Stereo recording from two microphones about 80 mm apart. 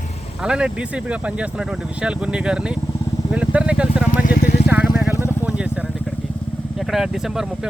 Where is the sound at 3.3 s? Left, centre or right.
Centre.